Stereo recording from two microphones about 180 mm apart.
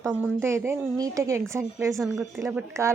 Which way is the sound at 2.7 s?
15° right (ahead or behind).